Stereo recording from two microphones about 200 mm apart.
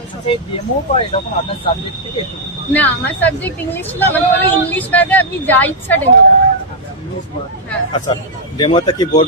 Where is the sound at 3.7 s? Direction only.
10° left (ahead or behind).